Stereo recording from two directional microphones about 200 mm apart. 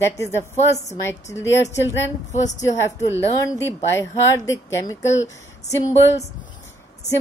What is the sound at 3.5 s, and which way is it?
Speech, 15° left (ahead or behind).